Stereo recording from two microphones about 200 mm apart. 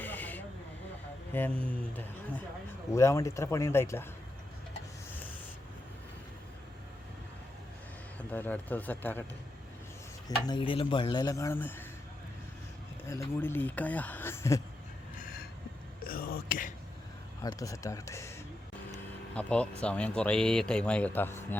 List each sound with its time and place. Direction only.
0.0 s owl: 10° left (ahead or behind)
1.3 s speech: 10° left (ahead or behind)
8.3 s speech: 10° left (ahead or behind)
10.2 s speech: 20° left (ahead or behind)
13.1 s speech: 10° left (ahead or behind)
15.2 s a sound: 45° left (ahead or behind)
16.0 s whispering: 45° left (ahead or behind)
17.4 s speech: 15° left (ahead or behind)
18.9 s vehicle: 5° left (ahead or behind)
19.8 s speech: 5° left (ahead or behind)